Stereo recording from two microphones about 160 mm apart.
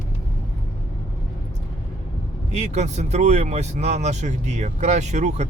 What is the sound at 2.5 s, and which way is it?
Speech, 45° right (ahead or behind).